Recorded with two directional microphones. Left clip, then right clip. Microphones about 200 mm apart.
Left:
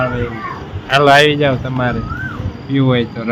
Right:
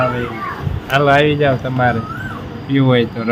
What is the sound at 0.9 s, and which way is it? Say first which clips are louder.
Speech: left 3 dB; 50° left (ahead or behind).